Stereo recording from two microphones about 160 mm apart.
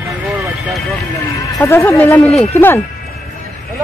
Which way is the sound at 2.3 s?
40° left (ahead or behind).